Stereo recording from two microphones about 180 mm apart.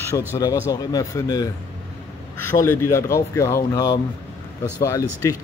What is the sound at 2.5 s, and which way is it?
A man's voice, 15° left (ahead or behind).